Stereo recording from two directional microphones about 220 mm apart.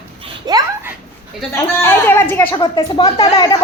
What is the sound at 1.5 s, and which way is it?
A woman's voice, 10° left (ahead or behind).